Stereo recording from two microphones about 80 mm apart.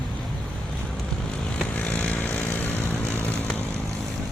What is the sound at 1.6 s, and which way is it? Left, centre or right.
Vehicle, centre.